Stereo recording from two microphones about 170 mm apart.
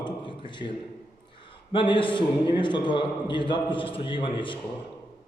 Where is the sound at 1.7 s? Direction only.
30° left (ahead or behind).